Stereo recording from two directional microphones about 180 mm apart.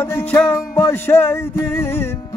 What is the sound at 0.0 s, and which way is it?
Music, 10° left (ahead or behind).